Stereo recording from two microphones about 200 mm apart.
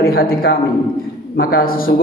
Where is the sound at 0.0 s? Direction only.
50° left (ahead or behind).